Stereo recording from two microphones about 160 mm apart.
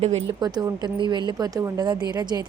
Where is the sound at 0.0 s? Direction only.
40° right (ahead or behind).